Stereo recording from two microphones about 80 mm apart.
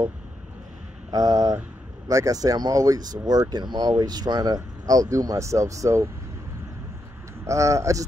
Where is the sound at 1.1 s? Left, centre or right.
Right.